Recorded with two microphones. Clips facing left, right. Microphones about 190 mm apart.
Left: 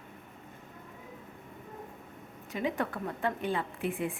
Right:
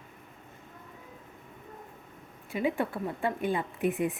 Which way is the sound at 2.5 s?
10° right (ahead or behind).